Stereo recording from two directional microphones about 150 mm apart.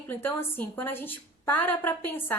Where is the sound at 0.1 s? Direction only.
15° left (ahead or behind).